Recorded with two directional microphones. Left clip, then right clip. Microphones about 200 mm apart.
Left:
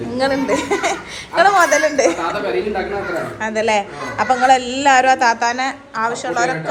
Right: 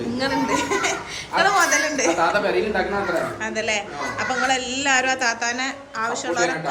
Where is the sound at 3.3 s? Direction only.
5° right (ahead or behind).